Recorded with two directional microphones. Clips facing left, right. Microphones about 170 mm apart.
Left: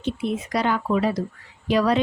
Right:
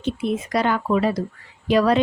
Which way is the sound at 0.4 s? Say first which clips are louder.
Right 1 dB; 50° right (ahead or behind).